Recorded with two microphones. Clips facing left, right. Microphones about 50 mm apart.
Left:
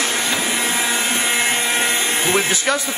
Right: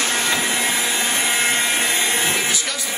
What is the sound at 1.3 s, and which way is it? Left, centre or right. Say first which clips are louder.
Helicopter: left 1 dB; centre.